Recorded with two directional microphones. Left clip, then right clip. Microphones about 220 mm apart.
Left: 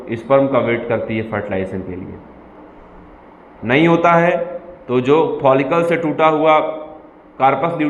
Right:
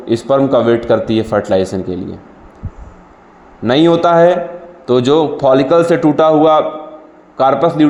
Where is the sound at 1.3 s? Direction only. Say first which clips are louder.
Right 9 dB; 50° right (ahead or behind).